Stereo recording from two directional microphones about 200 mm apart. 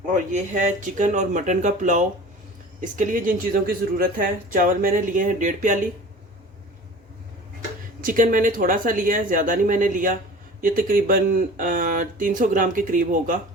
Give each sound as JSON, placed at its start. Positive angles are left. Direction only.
{"t": 0.3, "sound": "speech", "side_deg": -40}
{"t": 8.0, "sound": "speech", "side_deg": -40}